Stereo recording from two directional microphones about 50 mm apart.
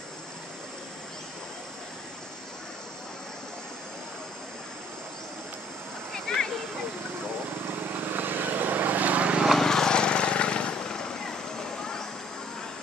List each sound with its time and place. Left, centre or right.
6.1 s a sound: centre
7.6 s vehicle: right
9.6 s vehicle: centre